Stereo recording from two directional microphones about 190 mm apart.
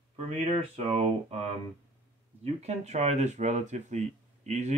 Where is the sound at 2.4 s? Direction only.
35° right (ahead or behind).